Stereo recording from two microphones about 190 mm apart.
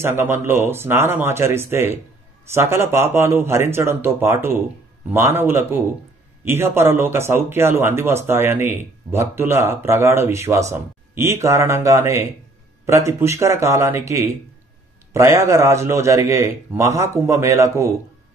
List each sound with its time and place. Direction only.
0.0 s speech: 10° right (ahead or behind)